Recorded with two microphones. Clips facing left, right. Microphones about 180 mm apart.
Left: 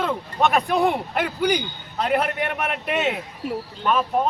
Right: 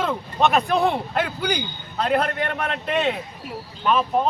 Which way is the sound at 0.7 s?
15° left (ahead or behind).